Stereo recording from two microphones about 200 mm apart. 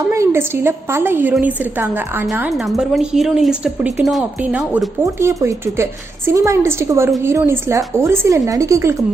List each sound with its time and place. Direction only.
0.1 s a woman's voice: 15° right (ahead or behind)